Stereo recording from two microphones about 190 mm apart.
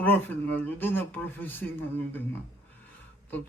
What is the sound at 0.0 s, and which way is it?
Speech, 10° left (ahead or behind).